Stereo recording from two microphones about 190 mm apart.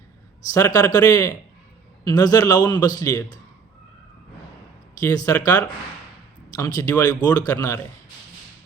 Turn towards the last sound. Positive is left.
turn(degrees=15)  # may be behind; listen again after turning